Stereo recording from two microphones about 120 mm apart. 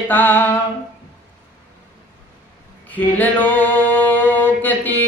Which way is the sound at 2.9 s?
15° left (ahead or behind).